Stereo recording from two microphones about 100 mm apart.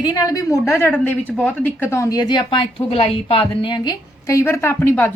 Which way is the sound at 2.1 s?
45° left (ahead or behind).